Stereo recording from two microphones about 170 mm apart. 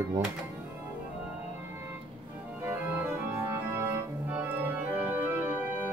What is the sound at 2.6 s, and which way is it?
Organ, 10° right (ahead or behind).